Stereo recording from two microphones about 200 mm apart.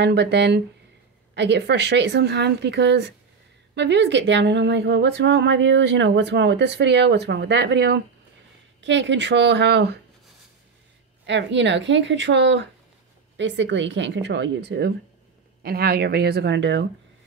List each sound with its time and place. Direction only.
0.0 s speech: 55° right (ahead or behind)
11.2 s speech: 65° right (ahead or behind)